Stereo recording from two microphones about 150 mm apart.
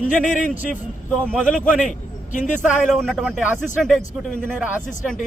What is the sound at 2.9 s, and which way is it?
Speech, 5° left (ahead or behind).